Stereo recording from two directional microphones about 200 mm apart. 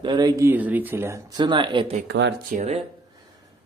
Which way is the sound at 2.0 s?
60° right (ahead or behind).